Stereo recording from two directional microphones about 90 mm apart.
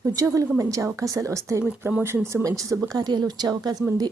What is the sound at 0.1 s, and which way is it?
Speech, 40° right (ahead or behind).